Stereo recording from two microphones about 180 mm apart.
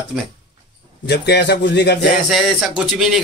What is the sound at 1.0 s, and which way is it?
Speech, 70° left (ahead or behind).